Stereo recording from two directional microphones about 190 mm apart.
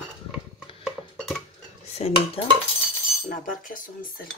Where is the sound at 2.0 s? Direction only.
35° left (ahead or behind).